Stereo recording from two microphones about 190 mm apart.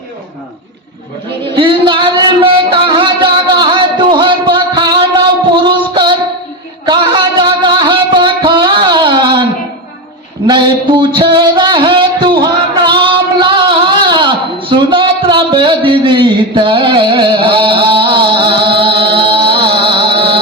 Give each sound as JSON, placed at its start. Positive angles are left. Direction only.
{"t": 1.5, "sound": "music", "side_deg": -25}
{"t": 5.9, "sound": "child singing", "side_deg": -25}
{"t": 6.8, "sound": "music", "side_deg": -25}
{"t": 10.4, "sound": "a sound", "side_deg": -25}
{"t": 20.1, "sound": "music", "side_deg": -25}